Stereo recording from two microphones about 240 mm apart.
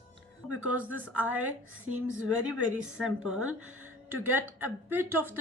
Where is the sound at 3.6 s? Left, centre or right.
Right.